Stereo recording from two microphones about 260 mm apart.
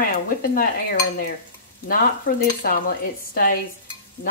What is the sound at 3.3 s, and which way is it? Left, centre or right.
Speech, left.